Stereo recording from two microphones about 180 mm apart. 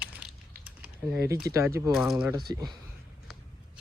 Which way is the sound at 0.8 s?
10° right (ahead or behind).